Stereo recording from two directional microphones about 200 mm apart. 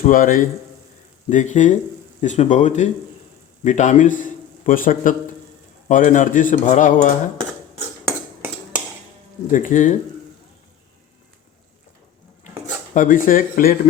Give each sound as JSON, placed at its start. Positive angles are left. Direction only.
{"t": 0.0, "sound": "a man's voice", "side_deg": 45}
{"t": 9.5, "sound": "a man's voice", "side_deg": 40}
{"t": 12.9, "sound": "speech", "side_deg": 40}